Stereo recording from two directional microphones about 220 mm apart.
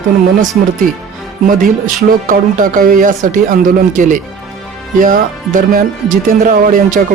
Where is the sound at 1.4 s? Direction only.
40° right (ahead or behind).